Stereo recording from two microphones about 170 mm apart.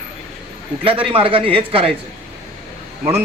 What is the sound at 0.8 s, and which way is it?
A man's voice, 30° right (ahead or behind).